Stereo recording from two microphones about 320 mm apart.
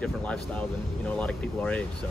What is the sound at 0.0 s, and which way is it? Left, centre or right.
Speech, centre.